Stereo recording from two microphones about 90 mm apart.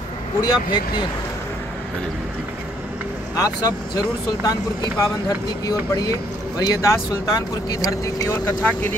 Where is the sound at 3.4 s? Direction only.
45° left (ahead or behind).